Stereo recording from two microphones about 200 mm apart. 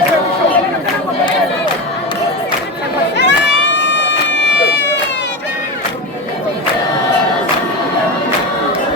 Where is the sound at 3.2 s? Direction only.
60° left (ahead or behind).